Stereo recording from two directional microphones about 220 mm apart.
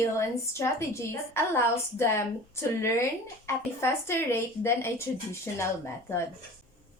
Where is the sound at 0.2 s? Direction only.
10° left (ahead or behind).